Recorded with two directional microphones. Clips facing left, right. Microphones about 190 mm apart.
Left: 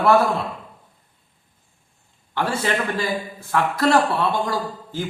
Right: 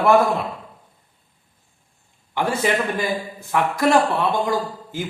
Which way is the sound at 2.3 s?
15° right (ahead or behind).